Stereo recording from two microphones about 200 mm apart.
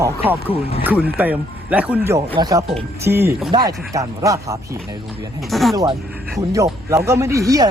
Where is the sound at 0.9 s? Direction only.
10° right (ahead or behind).